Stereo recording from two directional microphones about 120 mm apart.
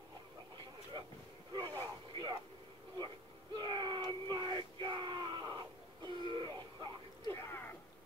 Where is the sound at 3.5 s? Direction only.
35° right (ahead or behind).